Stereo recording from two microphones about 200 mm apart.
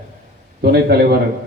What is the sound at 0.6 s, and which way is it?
Speech, 50° right (ahead or behind).